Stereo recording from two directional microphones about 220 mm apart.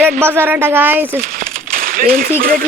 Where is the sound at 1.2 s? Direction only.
40° right (ahead or behind).